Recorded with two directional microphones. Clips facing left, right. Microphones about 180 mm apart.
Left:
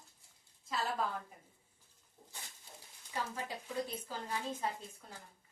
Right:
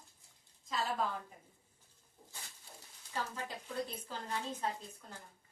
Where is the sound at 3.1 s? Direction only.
15° left (ahead or behind).